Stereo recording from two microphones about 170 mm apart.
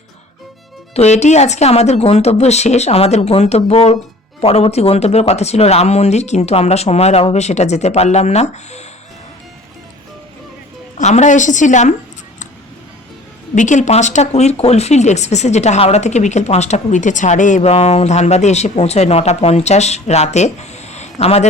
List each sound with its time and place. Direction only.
0.9 s speech: 40° left (ahead or behind)
10.9 s a woman's voice: 45° left (ahead or behind)
13.6 s speech: 45° left (ahead or behind)